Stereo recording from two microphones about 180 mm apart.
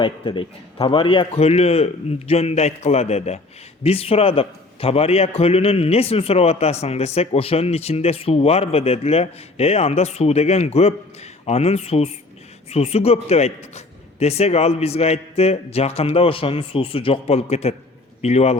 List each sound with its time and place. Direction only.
0.0 s a man's voice: 30° left (ahead or behind)